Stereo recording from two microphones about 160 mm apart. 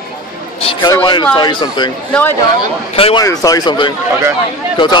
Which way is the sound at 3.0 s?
35° left (ahead or behind).